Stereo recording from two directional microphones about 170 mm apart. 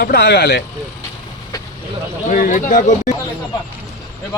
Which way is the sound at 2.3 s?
55° left (ahead or behind).